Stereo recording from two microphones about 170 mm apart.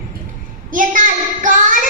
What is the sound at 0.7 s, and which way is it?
A woman's voice, 50° right (ahead or behind).